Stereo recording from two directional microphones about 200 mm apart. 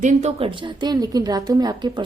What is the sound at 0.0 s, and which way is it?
A woman's voice, 35° right (ahead or behind).